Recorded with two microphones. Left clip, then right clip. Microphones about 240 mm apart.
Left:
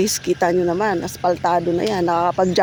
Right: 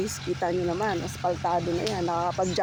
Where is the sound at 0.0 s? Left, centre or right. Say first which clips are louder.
Left 10 dB; left.